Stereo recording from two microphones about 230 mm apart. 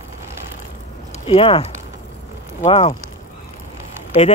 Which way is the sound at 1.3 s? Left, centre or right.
Left.